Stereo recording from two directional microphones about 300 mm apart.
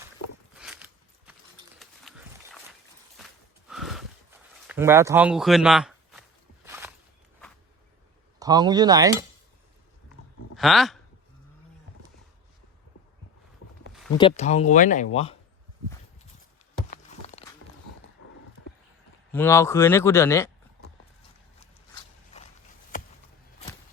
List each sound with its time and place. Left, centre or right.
0.5 s walk: centre
1.3 s a sound: centre
3.7 s a sound: centre
6.7 s walk: centre
8.4 s speech: centre
10.6 s speech: centre
14.2 s speech: centre
16.9 s walk: left
19.3 s speech: centre
21.9 s a sound: left